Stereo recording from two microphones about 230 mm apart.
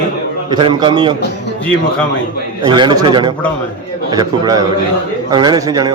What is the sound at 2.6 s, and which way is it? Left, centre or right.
A man's voice, centre.